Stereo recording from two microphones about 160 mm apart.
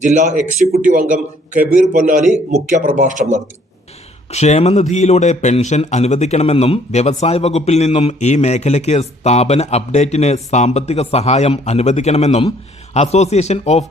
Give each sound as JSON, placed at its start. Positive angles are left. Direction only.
{"t": 0.0, "sound": "a man's voice", "side_deg": -50}
{"t": 4.3, "sound": "a man's voice", "side_deg": 45}